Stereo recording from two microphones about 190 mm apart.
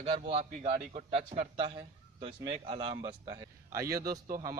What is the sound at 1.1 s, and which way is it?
A man's voice, 35° right (ahead or behind).